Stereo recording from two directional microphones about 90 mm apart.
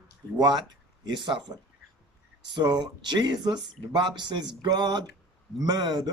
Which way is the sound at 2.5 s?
55° right (ahead or behind).